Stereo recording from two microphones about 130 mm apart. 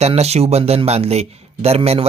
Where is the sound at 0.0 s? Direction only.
55° right (ahead or behind).